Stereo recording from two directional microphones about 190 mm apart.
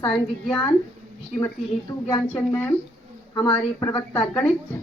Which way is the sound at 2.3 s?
10° left (ahead or behind).